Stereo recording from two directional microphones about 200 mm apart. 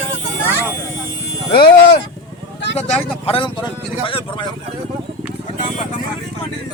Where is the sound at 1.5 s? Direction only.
50° left (ahead or behind).